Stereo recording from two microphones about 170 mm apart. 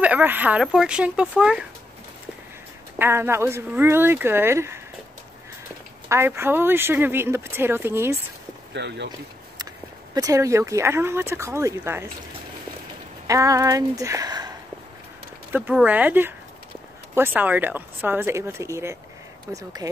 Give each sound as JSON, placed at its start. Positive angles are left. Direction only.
{"t": 0.0, "sound": "speech", "side_deg": -10}
{"t": 3.0, "sound": "speech", "side_deg": -15}
{"t": 6.0, "sound": "speech", "side_deg": -15}
{"t": 8.7, "sound": "speech", "side_deg": -90}
{"t": 10.1, "sound": "speech", "side_deg": -20}
{"t": 13.3, "sound": "speech", "side_deg": -20}
{"t": 15.5, "sound": "speech", "side_deg": -10}